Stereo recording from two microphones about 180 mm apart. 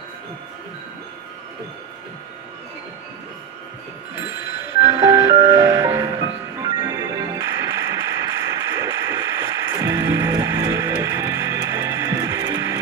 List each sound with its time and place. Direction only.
4.8 s music: 15° right (ahead or behind)